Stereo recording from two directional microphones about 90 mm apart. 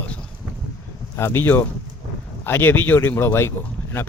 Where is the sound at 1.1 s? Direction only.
25° left (ahead or behind).